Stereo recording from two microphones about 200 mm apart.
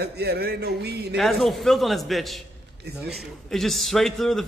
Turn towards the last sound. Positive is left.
turn(degrees=0)  # may be behind; listen again after turning